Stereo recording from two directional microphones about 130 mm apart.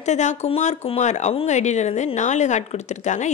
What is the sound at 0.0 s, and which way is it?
Speech, 65° left (ahead or behind).